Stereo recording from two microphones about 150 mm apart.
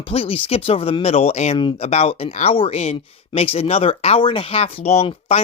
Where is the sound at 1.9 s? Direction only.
45° left (ahead or behind).